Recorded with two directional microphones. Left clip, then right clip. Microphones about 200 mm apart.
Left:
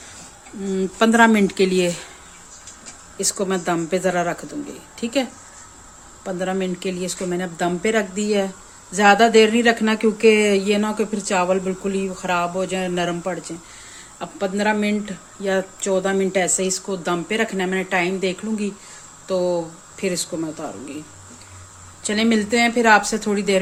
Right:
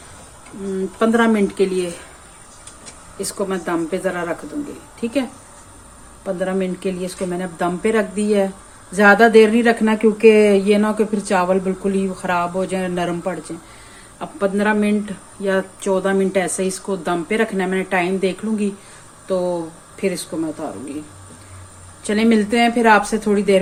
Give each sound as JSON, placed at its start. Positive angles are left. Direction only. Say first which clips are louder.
{"t": 0.9, "sound": "speech", "louder": "left 2 dB", "side_deg": 40}
{"t": 3.2, "sound": "a woman's voice", "louder": "left 1 dB", "side_deg": 30}
{"t": 6.2, "sound": "speech", "louder": "right 2 dB", "side_deg": 20}
{"t": 22.0, "sound": "speech", "louder": "right 3 dB", "side_deg": 15}